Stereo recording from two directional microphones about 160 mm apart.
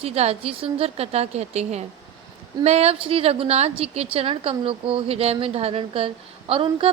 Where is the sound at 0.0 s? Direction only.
40° right (ahead or behind).